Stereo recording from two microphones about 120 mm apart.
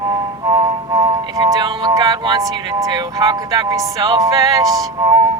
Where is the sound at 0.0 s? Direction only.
30° right (ahead or behind).